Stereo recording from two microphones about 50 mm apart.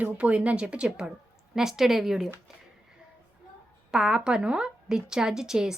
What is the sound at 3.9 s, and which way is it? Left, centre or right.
A woman's voice, centre.